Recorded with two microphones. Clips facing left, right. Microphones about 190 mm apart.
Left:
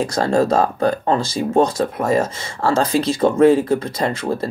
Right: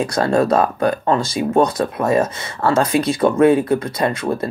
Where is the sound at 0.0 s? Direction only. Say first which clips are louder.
Right 1 dB; 30° left (ahead or behind).